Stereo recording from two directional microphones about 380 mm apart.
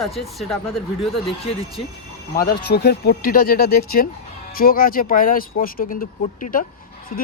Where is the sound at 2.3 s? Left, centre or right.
Left.